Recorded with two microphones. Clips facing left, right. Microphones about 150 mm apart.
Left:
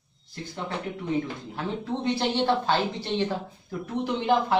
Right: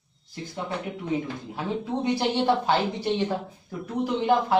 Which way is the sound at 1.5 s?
10° right (ahead or behind).